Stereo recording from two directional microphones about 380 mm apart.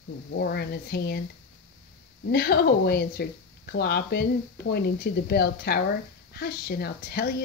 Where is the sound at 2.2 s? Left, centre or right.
Left.